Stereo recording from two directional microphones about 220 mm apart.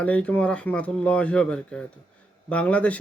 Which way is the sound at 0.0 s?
5° left (ahead or behind).